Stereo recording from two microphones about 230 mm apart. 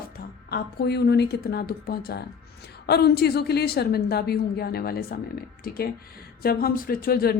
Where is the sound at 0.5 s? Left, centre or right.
Left.